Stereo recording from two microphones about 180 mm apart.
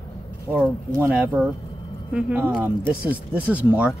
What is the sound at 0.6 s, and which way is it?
Speech, 5° left (ahead or behind).